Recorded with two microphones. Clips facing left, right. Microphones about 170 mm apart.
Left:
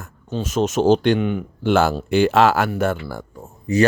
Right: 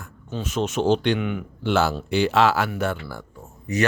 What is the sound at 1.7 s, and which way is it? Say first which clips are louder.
Speech: left 4 dB; 50° left (ahead or behind).